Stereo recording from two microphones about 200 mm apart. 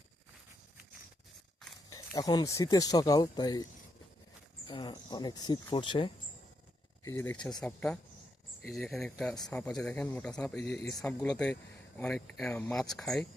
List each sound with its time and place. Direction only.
1.9 s speech: 15° left (ahead or behind)
7.0 s speech: 15° left (ahead or behind)